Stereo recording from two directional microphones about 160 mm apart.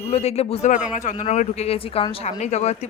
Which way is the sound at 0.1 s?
40° left (ahead or behind).